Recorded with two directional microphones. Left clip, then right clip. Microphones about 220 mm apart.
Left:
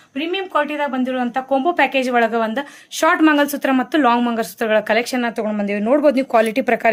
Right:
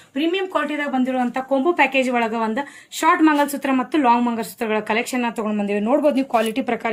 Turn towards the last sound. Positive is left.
turn(degrees=50)  # may be behind; listen again after turning